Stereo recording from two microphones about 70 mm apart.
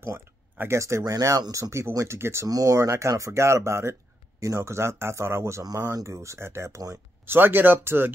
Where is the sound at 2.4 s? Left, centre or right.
Right.